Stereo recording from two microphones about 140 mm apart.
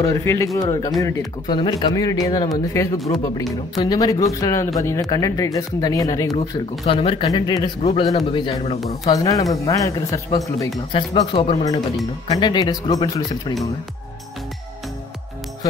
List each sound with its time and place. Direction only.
0.0 s a man's voice: 20° left (ahead or behind)
6.8 s speech: 45° left (ahead or behind)
7.2 s speech: 30° left (ahead or behind)
9.0 s a man's voice: 25° left (ahead or behind)
10.9 s speech: 40° left (ahead or behind)
12.4 s a man's voice: 30° left (ahead or behind)